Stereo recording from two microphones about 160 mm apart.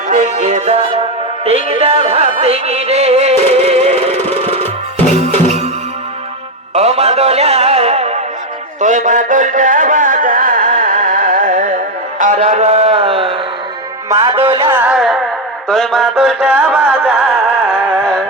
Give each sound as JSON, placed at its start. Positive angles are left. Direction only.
{"t": 0.1, "sound": "music", "side_deg": -50}
{"t": 4.6, "sound": "music", "side_deg": 10}
{"t": 5.3, "sound": "music", "side_deg": -45}
{"t": 6.7, "sound": "music", "side_deg": -40}
{"t": 12.2, "sound": "a sound", "side_deg": -50}
{"t": 14.1, "sound": "music", "side_deg": -20}
{"t": 14.3, "sound": "a sound", "side_deg": -35}
{"t": 14.6, "sound": "a sound", "side_deg": -10}
{"t": 15.7, "sound": "music", "side_deg": 0}